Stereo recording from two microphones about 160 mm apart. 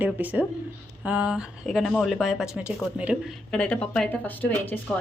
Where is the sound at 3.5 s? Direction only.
5° left (ahead or behind).